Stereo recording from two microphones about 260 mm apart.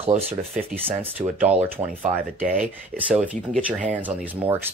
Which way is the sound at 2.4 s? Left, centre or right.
Centre.